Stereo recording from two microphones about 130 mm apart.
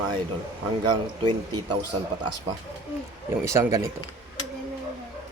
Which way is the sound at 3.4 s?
20° right (ahead or behind).